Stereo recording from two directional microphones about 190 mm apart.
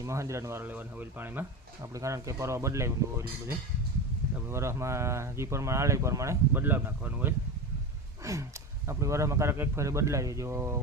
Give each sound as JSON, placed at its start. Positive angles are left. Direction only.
{"t": 0.0, "sound": "speech", "side_deg": -15}